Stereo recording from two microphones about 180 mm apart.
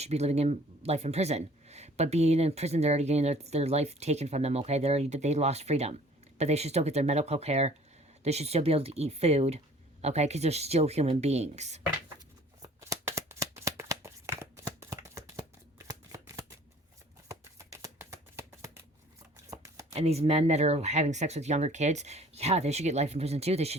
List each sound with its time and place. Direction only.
0.0 s speech: 35° right (ahead or behind)
12.6 s shuffling cards: 15° right (ahead or behind)
19.9 s speech: 35° right (ahead or behind)